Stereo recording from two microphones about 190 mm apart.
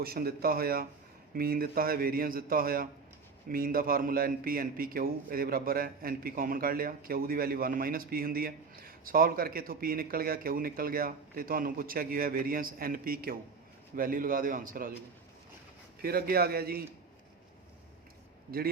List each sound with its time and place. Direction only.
0.0 s a man's voice: 50° right (ahead or behind)
16.0 s a man's voice: 50° right (ahead or behind)